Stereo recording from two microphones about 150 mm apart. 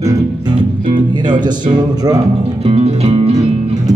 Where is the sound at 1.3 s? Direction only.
30° right (ahead or behind).